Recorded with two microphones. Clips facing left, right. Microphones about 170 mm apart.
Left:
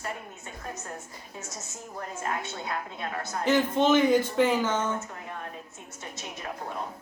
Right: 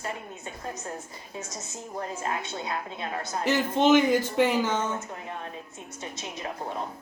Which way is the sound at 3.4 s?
10° right (ahead or behind).